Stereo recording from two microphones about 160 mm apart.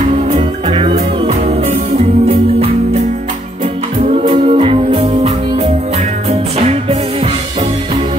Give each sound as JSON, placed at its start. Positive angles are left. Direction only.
{"t": 0.3, "sound": "music", "side_deg": -35}
{"t": 4.1, "sound": "music", "side_deg": -35}